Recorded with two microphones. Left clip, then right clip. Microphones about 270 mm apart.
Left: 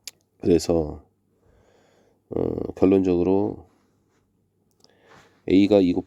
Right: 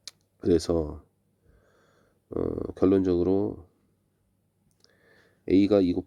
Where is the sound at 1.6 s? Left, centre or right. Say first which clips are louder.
Left 4 dB; centre.